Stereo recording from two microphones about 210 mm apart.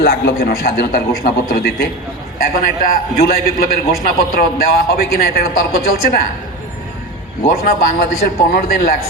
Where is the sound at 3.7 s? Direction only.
45° left (ahead or behind).